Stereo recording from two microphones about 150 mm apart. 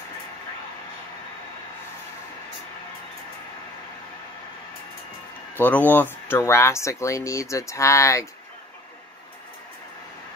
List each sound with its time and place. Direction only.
5.6 s speech: 10° left (ahead or behind)